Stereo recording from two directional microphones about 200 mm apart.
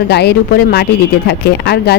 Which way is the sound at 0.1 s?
55° left (ahead or behind).